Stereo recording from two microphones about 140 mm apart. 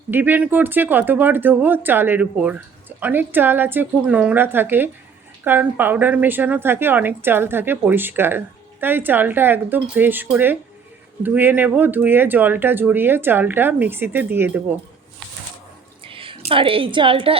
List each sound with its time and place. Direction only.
0.1 s speech: 15° right (ahead or behind)
16.0 s a woman's voice: 40° right (ahead or behind)